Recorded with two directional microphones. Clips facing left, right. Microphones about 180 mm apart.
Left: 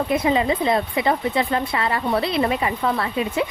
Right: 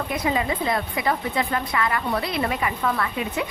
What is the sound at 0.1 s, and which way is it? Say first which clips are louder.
A woman's voice: left 4 dB; 25° left (ahead or behind).